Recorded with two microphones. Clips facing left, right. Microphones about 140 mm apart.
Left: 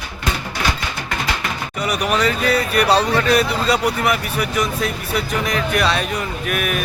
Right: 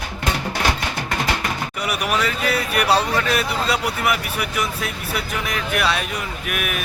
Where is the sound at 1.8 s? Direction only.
5° right (ahead or behind).